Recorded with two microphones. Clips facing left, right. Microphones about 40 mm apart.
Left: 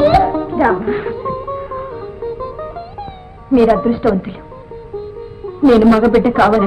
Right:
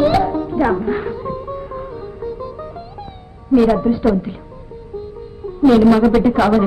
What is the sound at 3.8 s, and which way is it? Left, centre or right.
Speech, left.